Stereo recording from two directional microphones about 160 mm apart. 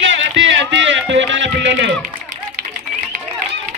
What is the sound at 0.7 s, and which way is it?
Music, 90° right.